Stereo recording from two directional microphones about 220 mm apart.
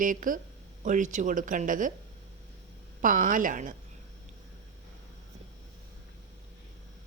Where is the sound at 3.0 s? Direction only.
35° right (ahead or behind).